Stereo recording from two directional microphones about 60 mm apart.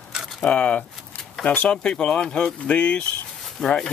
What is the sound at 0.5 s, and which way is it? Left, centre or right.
Speech, left.